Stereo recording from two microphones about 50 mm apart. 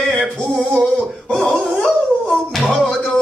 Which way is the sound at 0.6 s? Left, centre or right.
Centre.